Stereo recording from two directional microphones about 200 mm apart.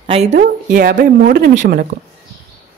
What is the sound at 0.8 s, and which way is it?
Speech, 45° right (ahead or behind).